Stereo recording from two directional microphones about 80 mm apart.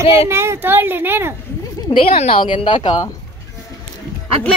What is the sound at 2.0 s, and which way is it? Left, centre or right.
A woman's voice, left.